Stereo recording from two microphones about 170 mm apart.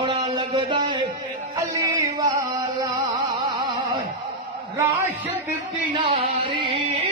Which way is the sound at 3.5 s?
25° right (ahead or behind).